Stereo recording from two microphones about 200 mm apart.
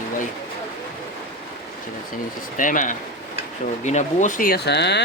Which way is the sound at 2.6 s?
40° left (ahead or behind).